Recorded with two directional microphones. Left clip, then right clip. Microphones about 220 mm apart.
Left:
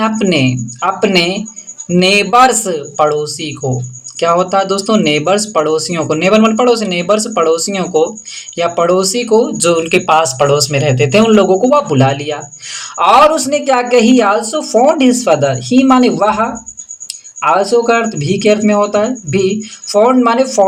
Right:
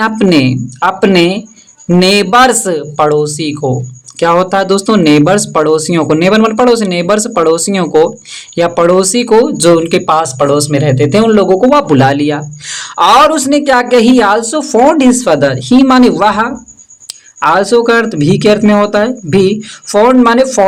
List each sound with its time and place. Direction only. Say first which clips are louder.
0.0 s speech: right 3 dB; 35° right (ahead or behind)